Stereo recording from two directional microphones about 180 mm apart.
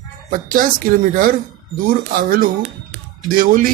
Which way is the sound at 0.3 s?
50° right (ahead or behind).